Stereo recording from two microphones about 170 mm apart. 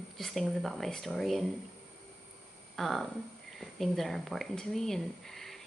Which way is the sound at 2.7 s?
Centre (ahead or behind).